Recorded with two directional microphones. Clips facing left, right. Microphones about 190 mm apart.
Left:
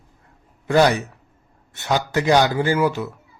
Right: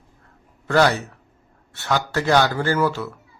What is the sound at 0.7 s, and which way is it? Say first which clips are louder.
A man's voice: left 2 dB; 15° left (ahead or behind).